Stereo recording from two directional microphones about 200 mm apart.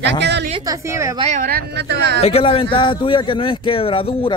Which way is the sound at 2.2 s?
30° left (ahead or behind).